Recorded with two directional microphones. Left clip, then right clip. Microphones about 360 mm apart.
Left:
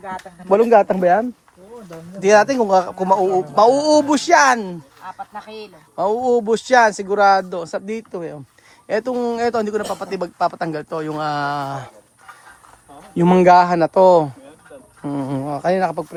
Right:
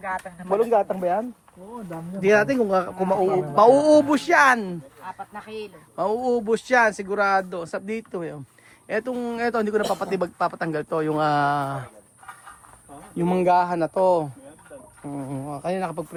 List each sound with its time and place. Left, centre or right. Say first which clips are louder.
0.5 s speech: left 8 dB; left
2.2 s a man's voice: left 6 dB; centre
13.1 s speech: left 8 dB; left